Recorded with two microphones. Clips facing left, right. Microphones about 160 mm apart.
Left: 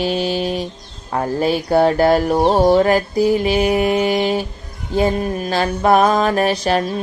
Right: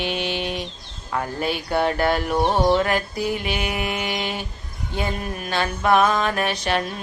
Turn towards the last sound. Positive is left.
turn(degrees=35)  # may be behind; listen again after turning